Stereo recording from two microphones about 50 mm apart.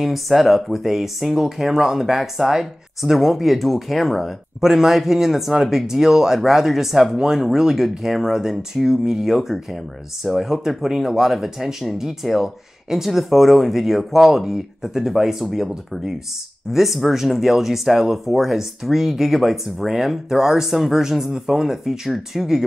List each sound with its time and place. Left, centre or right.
0.0 s speech: centre